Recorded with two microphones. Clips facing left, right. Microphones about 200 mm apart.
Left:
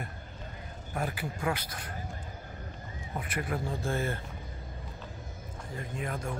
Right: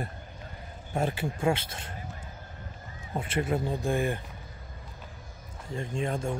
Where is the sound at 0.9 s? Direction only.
25° right (ahead or behind).